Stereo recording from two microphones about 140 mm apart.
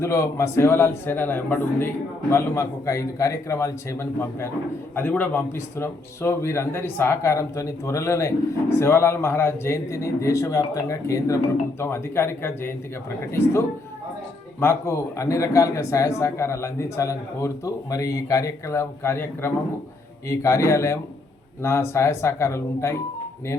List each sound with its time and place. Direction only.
0.0 s a man's voice: 20° left (ahead or behind)